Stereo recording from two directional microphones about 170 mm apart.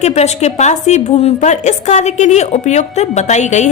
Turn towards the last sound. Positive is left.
turn(degrees=45)  # may be behind; listen again after turning